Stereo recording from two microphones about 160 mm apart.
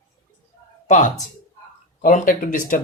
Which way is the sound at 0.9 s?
45° left (ahead or behind).